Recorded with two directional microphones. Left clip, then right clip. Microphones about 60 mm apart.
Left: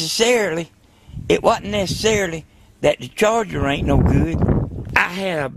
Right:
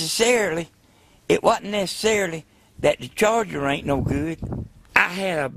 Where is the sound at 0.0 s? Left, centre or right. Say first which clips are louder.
Left 3 dB; right.